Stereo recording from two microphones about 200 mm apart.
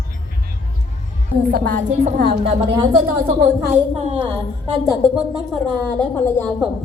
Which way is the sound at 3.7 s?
35° right (ahead or behind).